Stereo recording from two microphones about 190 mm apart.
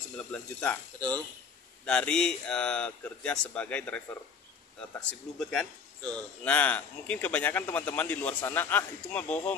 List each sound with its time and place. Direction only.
0.2 s speech: 5° left (ahead or behind)
0.9 s speech: 20° right (ahead or behind)
1.9 s speech: 5° left (ahead or behind)
5.4 s speech: centre (ahead or behind)